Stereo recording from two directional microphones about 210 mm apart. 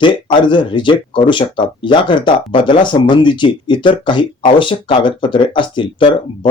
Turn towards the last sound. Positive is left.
turn(degrees=20)  # may be behind; listen again after turning